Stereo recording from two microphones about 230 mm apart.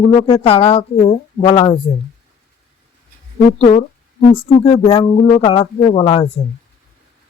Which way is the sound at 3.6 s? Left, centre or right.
Left.